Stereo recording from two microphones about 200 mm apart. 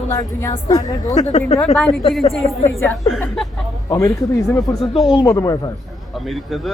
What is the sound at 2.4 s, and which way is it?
Speech, 15° left (ahead or behind).